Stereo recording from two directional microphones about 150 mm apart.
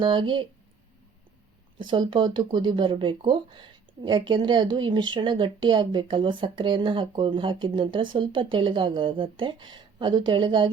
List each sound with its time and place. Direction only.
0.0 s speech: 30° right (ahead or behind)
1.8 s speech: 35° right (ahead or behind)